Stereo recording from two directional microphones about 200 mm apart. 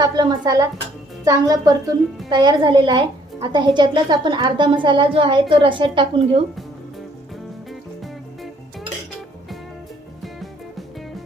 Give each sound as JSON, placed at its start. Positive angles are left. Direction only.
{"t": 0.0, "sound": "speech", "side_deg": -20}